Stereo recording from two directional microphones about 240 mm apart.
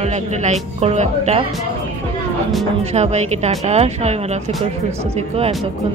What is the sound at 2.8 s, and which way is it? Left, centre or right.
Speech, right.